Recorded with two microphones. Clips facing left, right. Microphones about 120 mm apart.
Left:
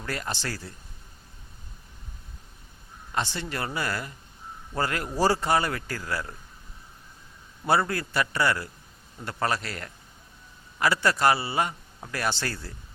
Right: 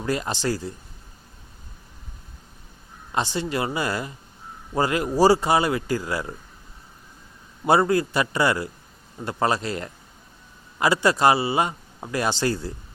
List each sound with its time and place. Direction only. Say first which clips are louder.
0.0 s a man's voice: right 7 dB; 15° right (ahead or behind)
3.1 s a man's voice: right 5 dB; 15° right (ahead or behind)
7.6 s a man's voice: right 6 dB; 20° right (ahead or behind)